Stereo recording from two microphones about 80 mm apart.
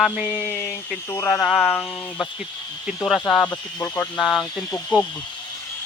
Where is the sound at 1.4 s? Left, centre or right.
Centre.